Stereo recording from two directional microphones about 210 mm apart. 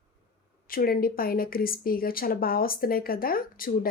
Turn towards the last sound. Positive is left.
turn(degrees=45)  # may be behind; listen again after turning